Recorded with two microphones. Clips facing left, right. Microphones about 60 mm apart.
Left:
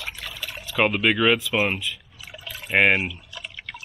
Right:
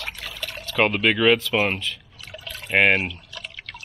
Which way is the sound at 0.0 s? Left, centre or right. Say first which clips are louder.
Right 1 dB; centre.